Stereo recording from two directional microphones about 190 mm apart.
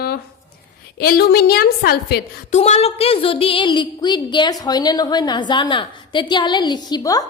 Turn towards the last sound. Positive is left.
turn(degrees=20)  # may be behind; listen again after turning